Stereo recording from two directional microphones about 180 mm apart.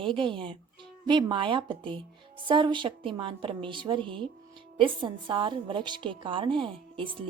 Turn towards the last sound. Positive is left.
turn(degrees=-30)  # may be behind; listen again after turning